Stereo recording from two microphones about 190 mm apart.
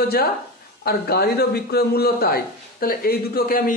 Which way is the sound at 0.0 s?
55° left (ahead or behind).